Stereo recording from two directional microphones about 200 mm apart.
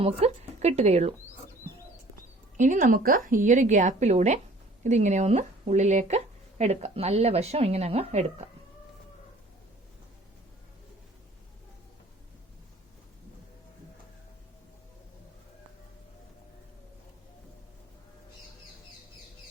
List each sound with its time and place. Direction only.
0.0 s speech: 30° right (ahead or behind)
2.6 s speech: 40° right (ahead or behind)